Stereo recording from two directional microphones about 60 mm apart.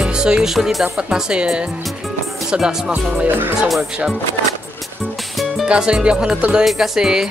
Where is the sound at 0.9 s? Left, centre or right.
Centre.